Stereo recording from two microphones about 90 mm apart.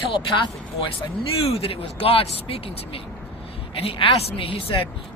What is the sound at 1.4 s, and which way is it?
A woman's voice, 90° left.